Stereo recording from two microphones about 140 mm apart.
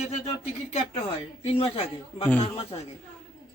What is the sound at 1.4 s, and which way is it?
Speech, 45° left (ahead or behind).